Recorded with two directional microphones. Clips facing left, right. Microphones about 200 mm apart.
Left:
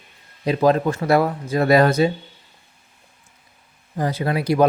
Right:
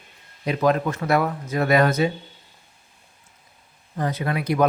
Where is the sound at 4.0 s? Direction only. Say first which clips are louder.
Left 3 dB; 30° left (ahead or behind).